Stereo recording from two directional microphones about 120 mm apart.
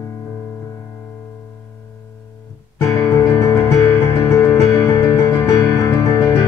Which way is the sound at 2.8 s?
25° left (ahead or behind).